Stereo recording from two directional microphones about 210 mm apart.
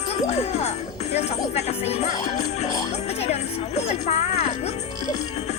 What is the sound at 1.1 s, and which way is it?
Music, 30° left (ahead or behind).